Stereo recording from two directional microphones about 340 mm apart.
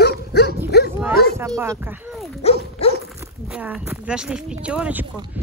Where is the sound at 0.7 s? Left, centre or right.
Left.